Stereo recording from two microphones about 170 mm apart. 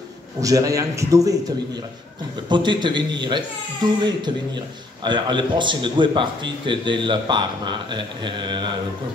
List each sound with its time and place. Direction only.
0.4 s a man's voice: 20° right (ahead or behind)
2.5 s a man's voice: 25° right (ahead or behind)